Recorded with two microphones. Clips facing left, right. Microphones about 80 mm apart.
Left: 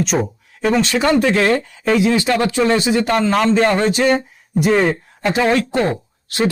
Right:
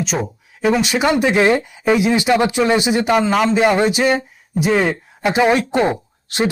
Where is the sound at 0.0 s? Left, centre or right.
Centre.